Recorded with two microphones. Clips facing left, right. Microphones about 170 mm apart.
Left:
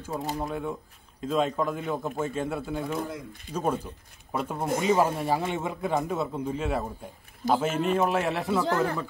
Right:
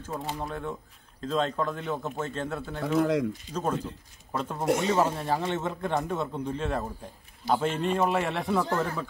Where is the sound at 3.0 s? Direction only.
90° right.